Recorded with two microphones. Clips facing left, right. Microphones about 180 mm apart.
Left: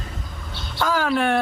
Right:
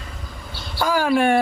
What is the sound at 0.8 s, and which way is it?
Speech, 5° right (ahead or behind).